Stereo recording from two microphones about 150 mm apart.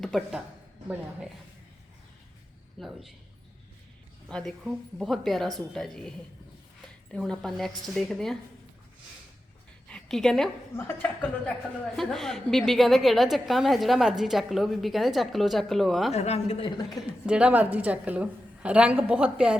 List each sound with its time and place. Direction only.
0.0 s speech: centre (ahead or behind)
2.8 s a woman's voice: centre (ahead or behind)
4.3 s a woman's voice: 5° left (ahead or behind)
9.9 s a woman's voice: centre (ahead or behind)
10.8 s a woman's voice: 15° left (ahead or behind)
16.1 s a woman's voice: 45° left (ahead or behind)
17.0 s a woman's voice: 5° right (ahead or behind)